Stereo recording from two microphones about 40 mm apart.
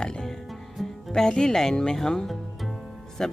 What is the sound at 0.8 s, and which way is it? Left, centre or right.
Music, centre.